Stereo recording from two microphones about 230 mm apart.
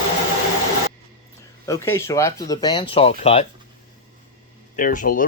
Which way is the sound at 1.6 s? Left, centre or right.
Centre.